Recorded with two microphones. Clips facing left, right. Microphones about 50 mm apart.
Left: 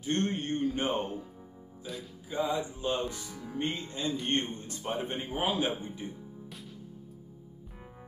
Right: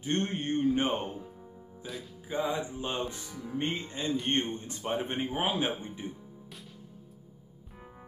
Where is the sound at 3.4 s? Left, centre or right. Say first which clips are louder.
Right 1 dB; right.